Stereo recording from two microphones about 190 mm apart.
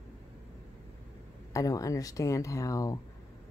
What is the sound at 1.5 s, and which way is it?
Speech, 15° left (ahead or behind).